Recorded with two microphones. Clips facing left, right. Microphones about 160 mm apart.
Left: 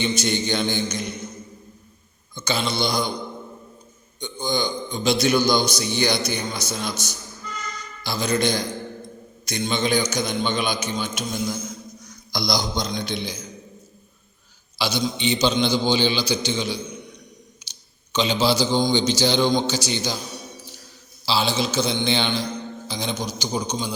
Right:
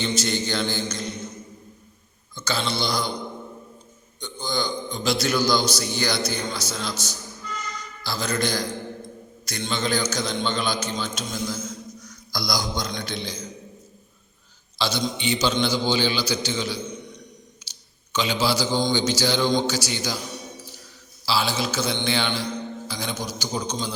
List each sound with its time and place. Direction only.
0.0 s a man's voice: 15° left (ahead or behind)
2.3 s a man's voice: 15° left (ahead or behind)
4.2 s a man's voice: 15° left (ahead or behind)
8.0 s a man's voice: 20° left (ahead or behind)
14.8 s a man's voice: 10° left (ahead or behind)
18.1 s a man's voice: 20° left (ahead or behind)
21.2 s a man's voice: 20° left (ahead or behind)